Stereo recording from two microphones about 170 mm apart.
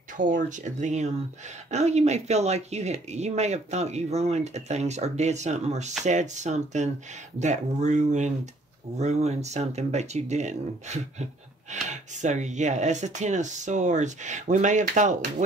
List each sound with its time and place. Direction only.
0.2 s speech: 50° right (ahead or behind)